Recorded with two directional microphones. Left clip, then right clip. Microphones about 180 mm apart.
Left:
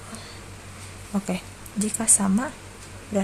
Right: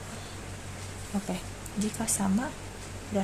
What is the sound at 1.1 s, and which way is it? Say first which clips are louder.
Speech: left 6 dB; 30° left (ahead or behind).